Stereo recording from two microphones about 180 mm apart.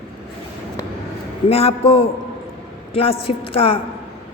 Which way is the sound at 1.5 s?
35° left (ahead or behind).